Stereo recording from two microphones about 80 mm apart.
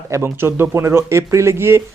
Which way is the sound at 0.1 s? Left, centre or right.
Right.